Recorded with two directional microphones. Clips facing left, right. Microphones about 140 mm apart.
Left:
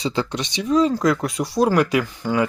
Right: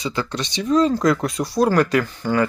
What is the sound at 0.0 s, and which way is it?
Speech, 25° left (ahead or behind).